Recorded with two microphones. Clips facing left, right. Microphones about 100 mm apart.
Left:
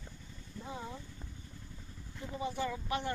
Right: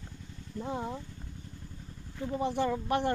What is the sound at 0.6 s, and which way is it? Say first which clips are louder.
Speech: right 8 dB; 55° right (ahead or behind).